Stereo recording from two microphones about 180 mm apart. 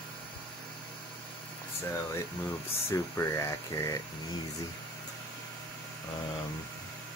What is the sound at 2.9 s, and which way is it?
Speech, 15° left (ahead or behind).